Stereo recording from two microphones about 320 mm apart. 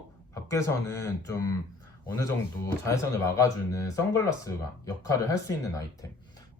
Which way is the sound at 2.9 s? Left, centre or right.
Centre.